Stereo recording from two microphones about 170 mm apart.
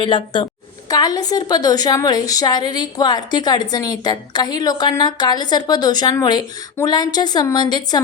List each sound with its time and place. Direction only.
0.0 s a woman's voice: 30° left (ahead or behind)